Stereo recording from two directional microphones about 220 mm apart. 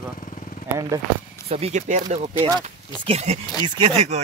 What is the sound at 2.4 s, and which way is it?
Speech, 15° right (ahead or behind).